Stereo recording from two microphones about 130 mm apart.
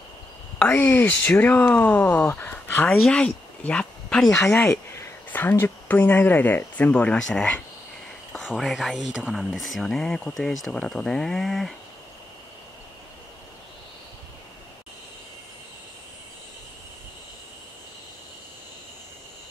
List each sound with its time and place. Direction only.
0.6 s speech: 10° left (ahead or behind)
4.4 s speech: 20° left (ahead or behind); by 11.7 s centre (ahead or behind)